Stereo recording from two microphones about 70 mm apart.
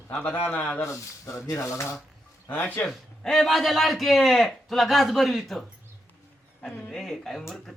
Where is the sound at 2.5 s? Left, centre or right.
Left.